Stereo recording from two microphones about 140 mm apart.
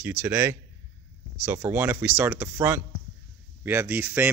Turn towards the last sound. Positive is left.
turn(degrees=-15)  # may be behind; listen again after turning